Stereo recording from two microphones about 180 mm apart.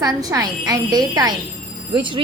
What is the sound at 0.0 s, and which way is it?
A woman's voice, 20° right (ahead or behind).